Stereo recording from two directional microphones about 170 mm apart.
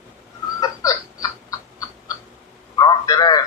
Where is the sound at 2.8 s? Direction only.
25° left (ahead or behind).